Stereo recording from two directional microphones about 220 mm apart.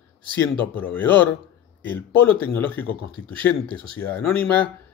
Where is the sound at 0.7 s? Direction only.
10° left (ahead or behind).